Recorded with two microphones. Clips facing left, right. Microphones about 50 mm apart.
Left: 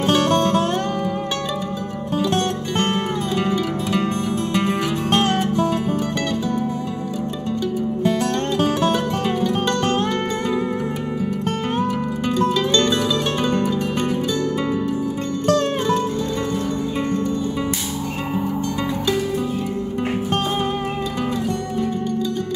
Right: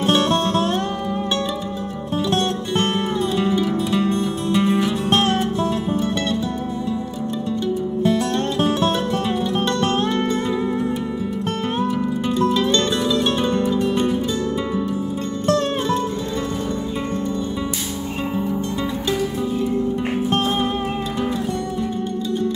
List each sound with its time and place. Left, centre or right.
3.9 s music: left
13.7 s music: left